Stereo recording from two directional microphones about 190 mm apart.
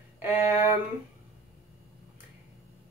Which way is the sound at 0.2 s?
10° right (ahead or behind).